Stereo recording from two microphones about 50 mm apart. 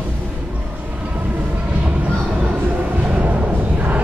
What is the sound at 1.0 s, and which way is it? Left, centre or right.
Vehicle, right.